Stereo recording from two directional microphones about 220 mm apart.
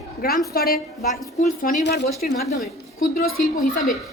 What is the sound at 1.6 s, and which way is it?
A woman's voice, 45° left (ahead or behind).